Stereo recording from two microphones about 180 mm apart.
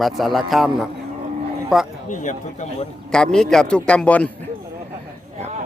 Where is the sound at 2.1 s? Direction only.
45° left (ahead or behind).